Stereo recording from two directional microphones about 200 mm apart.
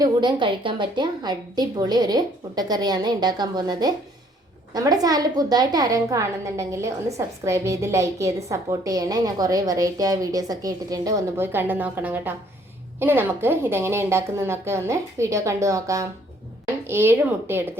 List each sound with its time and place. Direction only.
0.0 s a woman's voice: 20° right (ahead or behind)